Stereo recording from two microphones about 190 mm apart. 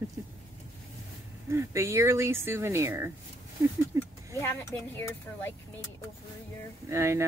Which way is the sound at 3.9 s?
20° right (ahead or behind).